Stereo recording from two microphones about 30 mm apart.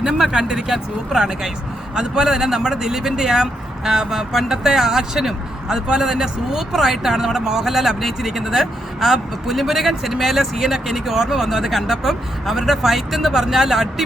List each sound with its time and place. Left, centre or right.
0.3 s speech: centre